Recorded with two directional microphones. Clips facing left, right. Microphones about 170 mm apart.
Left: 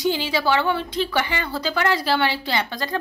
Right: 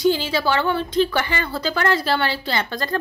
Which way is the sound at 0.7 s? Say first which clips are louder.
Right 5 dB; 45° right (ahead or behind).